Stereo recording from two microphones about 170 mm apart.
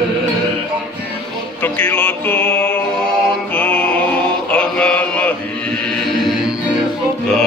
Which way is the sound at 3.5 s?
10° left (ahead or behind).